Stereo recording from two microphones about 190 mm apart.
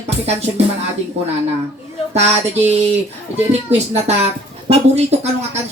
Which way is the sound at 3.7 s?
35° right (ahead or behind).